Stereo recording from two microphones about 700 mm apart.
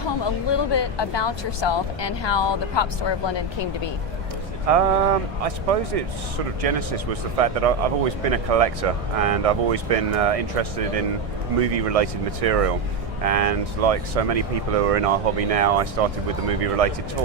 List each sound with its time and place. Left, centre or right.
0.4 s speech: left
4.7 s speech: right